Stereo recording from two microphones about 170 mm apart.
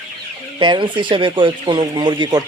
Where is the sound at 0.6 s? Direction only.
30° right (ahead or behind).